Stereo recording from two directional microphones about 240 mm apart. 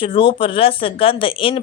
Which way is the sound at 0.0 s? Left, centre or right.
Left.